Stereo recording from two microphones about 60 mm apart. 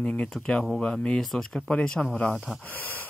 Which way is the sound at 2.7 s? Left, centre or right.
Left.